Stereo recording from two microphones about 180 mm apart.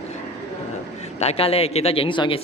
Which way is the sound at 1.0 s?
35° left (ahead or behind).